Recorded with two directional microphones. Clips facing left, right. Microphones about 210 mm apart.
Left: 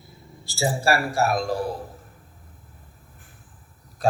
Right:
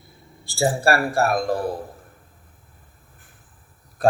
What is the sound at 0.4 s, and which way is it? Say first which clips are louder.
A man's voice: right 3 dB; 55° right (ahead or behind).